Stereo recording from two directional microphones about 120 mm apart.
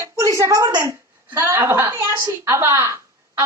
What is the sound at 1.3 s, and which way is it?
A woman's voice, 20° right (ahead or behind).